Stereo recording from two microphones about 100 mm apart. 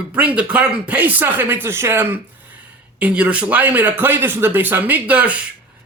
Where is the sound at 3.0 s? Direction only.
15° right (ahead or behind).